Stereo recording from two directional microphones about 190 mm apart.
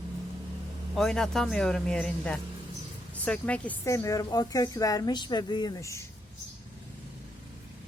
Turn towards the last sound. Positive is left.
turn(degrees=15)  # may be behind; listen again after turning